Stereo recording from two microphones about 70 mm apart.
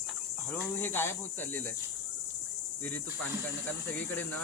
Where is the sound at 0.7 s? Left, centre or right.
Left.